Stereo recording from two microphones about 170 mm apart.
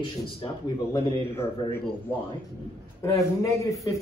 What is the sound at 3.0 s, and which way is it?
Speech, 20° left (ahead or behind).